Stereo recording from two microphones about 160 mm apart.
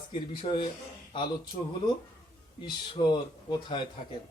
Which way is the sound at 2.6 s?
30° left (ahead or behind).